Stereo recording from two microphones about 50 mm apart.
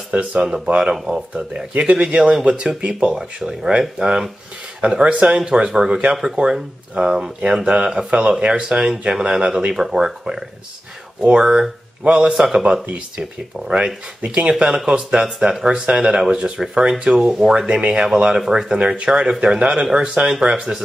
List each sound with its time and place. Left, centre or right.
0.1 s speech: right
1.1 s speech: centre
1.5 s speech: centre
14.2 s speech: right